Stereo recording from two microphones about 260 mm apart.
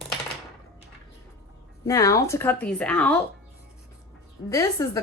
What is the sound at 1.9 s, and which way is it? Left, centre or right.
A woman's voice, centre.